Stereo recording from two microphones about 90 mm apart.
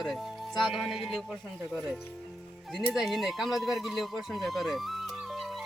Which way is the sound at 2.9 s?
Centre (ahead or behind).